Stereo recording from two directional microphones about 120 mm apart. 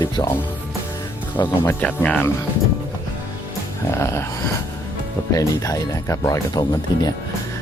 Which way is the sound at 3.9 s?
20° left (ahead or behind).